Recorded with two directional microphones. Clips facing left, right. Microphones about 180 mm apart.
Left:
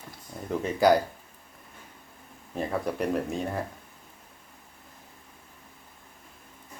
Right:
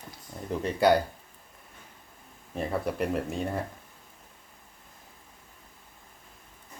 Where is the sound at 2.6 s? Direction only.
Centre (ahead or behind).